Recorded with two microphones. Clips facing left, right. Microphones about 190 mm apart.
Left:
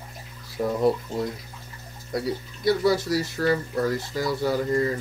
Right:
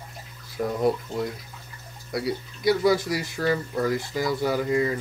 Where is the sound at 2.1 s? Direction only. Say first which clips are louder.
Even; 10° right (ahead or behind).